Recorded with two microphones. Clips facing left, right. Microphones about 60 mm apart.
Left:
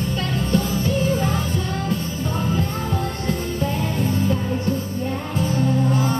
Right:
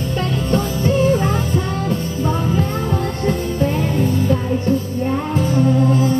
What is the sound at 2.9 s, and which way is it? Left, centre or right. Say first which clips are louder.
Music: right 5 dB; right.